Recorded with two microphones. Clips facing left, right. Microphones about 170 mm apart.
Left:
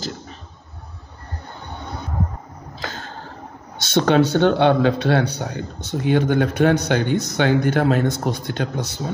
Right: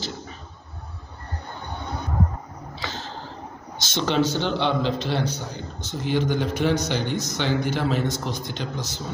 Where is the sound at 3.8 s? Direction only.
60° left (ahead or behind).